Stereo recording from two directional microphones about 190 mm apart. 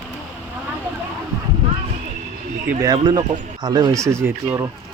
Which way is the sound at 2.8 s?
20° right (ahead or behind).